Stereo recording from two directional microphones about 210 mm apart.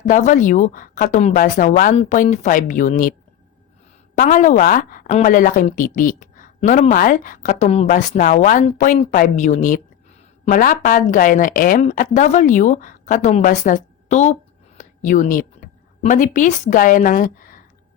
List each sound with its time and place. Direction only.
0.0 s a woman's voice: 35° left (ahead or behind)
4.2 s a woman's voice: 35° left (ahead or behind)
14.8 s a sound: 35° left (ahead or behind)
16.0 s a woman's voice: 35° left (ahead or behind)